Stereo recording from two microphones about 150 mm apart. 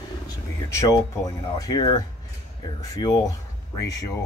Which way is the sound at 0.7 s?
20° left (ahead or behind).